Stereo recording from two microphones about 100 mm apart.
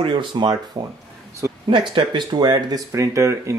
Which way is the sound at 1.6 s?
55° right (ahead or behind).